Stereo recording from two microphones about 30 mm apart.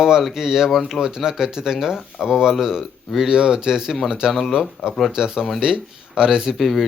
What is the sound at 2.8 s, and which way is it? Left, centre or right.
Speech, centre.